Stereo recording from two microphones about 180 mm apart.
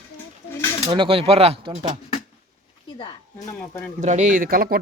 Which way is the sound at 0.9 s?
30° right (ahead or behind).